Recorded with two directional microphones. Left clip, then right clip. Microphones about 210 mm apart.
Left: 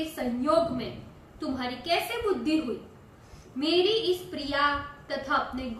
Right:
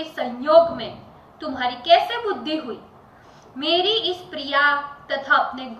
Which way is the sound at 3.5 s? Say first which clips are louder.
Right 5 dB; 25° left (ahead or behind).